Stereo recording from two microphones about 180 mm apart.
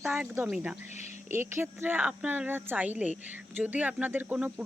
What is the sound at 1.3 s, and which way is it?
A woman's voice, 15° right (ahead or behind).